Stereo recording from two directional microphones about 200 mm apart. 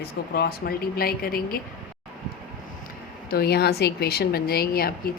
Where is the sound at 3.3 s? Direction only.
50° left (ahead or behind).